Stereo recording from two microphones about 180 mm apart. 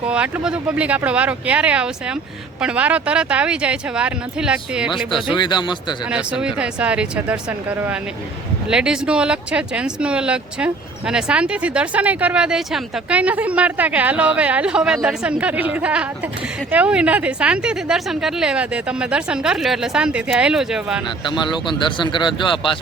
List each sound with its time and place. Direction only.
0.1 s a woman's voice: 5° right (ahead or behind)
5.4 s speech: 25° left (ahead or behind)
6.1 s a woman's voice: 5° right (ahead or behind)
21.2 s speech: 25° left (ahead or behind)